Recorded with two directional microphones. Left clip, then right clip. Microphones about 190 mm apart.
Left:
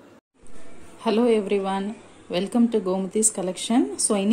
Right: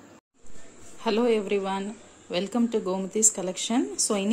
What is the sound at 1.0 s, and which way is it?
A woman's voice, centre (ahead or behind).